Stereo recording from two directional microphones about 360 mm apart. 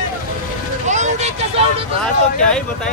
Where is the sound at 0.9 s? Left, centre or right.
Centre.